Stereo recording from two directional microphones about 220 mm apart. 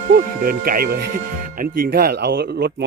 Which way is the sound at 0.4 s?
40° right (ahead or behind).